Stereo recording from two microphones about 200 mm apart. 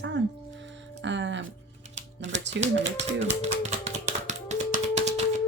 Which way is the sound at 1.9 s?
65° right (ahead or behind).